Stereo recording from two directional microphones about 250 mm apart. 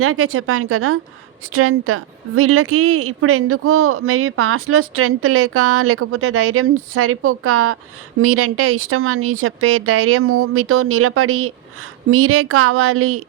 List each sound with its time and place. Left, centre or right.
0.0 s a woman's voice: right